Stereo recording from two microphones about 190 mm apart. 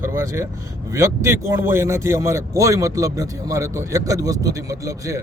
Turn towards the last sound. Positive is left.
turn(degrees=-20)  # may be behind; listen again after turning